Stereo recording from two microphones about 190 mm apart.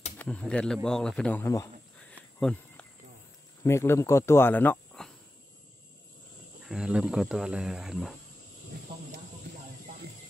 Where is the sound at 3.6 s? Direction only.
15° left (ahead or behind).